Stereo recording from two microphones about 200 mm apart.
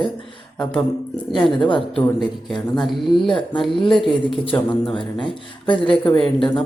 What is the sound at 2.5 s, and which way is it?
Speech, centre (ahead or behind).